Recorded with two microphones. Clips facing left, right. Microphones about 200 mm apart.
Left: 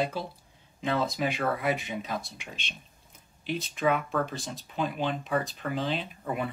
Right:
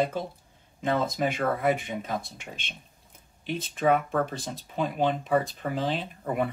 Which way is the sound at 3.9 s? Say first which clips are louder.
Right 3 dB; 50° right (ahead or behind).